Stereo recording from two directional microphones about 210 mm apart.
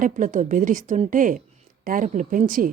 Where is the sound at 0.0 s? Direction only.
35° right (ahead or behind).